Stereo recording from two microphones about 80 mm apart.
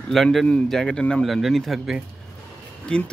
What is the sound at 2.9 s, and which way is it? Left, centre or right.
Speech, centre.